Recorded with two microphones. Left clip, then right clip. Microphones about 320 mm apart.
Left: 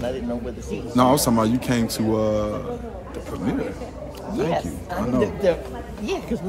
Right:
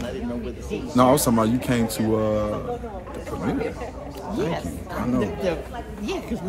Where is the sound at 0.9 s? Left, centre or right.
Centre.